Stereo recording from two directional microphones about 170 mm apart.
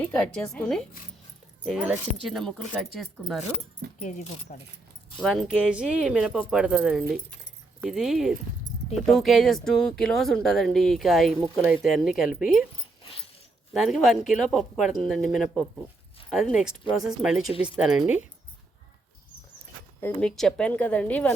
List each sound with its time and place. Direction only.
0.0 s speech: 5° left (ahead or behind)
4.0 s speech: 45° left (ahead or behind)
5.2 s speech: centre (ahead or behind)
13.7 s speech: centre (ahead or behind)
20.0 s speech: 10° left (ahead or behind)